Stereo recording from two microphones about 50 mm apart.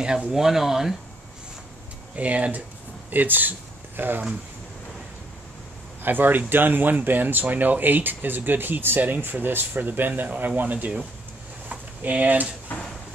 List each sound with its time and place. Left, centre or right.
0.0 s speech: centre
2.1 s speech: right
6.0 s speech: right
11.7 s a sound: right